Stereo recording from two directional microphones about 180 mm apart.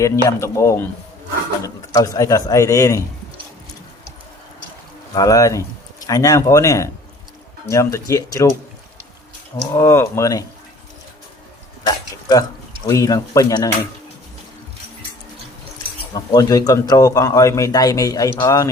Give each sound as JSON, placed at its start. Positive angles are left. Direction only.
{"t": 0.0, "sound": "speech", "side_deg": 15}
{"t": 5.1, "sound": "speech", "side_deg": 20}
{"t": 9.7, "sound": "speech", "side_deg": 15}
{"t": 11.9, "sound": "speech", "side_deg": 20}
{"t": 16.1, "sound": "speech", "side_deg": 20}